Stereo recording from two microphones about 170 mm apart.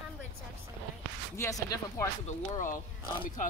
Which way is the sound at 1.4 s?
20° left (ahead or behind).